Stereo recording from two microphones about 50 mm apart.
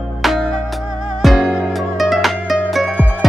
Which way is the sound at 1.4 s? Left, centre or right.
Right.